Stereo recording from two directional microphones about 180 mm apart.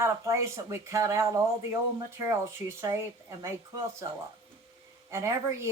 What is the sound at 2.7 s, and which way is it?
Speech, 15° right (ahead or behind).